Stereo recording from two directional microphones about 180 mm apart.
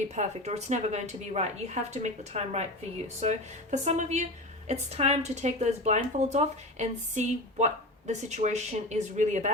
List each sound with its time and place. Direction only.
0.2 s speech: 40° right (ahead or behind)